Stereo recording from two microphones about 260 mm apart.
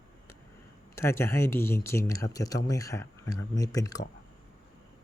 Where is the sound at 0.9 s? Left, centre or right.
Centre.